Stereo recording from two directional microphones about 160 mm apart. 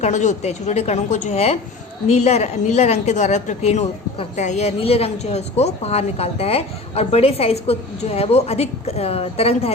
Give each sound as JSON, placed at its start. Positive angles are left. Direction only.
{"t": 0.0, "sound": "a woman's voice", "side_deg": 50}